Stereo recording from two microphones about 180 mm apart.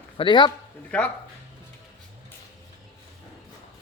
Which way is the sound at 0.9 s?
5° left (ahead or behind).